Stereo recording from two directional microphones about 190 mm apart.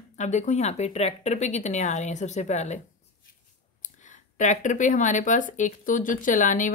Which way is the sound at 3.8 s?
40° left (ahead or behind).